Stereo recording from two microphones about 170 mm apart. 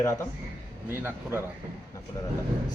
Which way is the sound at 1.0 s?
15° right (ahead or behind).